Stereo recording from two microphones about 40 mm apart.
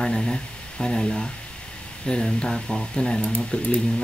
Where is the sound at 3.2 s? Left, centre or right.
Left.